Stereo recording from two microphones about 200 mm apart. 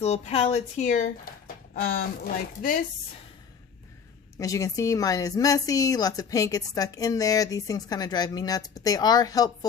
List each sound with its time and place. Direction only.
0.0 s speech: 30° left (ahead or behind)
4.4 s a woman's voice: 15° left (ahead or behind)